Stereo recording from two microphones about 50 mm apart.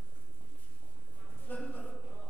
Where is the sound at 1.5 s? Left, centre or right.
Left.